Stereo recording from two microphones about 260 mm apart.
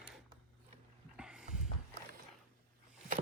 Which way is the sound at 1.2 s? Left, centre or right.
Centre.